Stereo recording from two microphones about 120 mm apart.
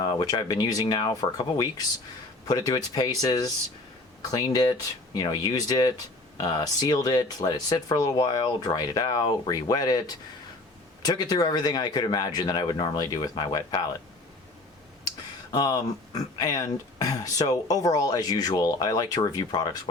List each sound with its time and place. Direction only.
0.0 s speech: 30° left (ahead or behind)
11.0 s speech: 35° left (ahead or behind)
15.5 s speech: 35° left (ahead or behind)